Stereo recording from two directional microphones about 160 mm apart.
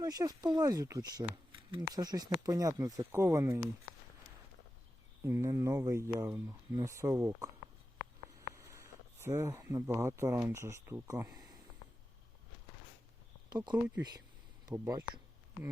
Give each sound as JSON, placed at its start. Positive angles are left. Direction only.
{"t": 0.0, "sound": "speech", "side_deg": -25}
{"t": 5.2, "sound": "speech", "side_deg": -15}
{"t": 8.4, "sound": "a sound", "side_deg": -20}
{"t": 9.2, "sound": "speech", "side_deg": -20}
{"t": 13.5, "sound": "speech", "side_deg": -25}